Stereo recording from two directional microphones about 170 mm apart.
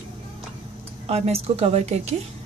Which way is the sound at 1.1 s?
40° right (ahead or behind).